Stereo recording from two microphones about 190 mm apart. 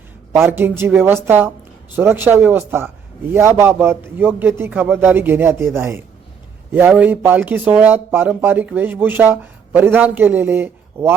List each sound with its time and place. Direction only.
0.3 s speech: 15° right (ahead or behind)